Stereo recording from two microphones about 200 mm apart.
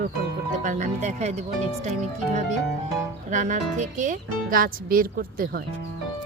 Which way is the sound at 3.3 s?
40° right (ahead or behind).